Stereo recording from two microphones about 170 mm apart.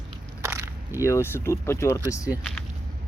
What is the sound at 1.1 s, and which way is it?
Speech, 15° left (ahead or behind).